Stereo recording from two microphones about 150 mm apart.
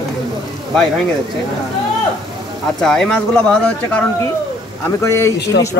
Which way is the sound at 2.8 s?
5° left (ahead or behind).